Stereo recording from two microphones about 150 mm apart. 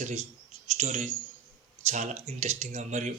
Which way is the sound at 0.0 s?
45° right (ahead or behind).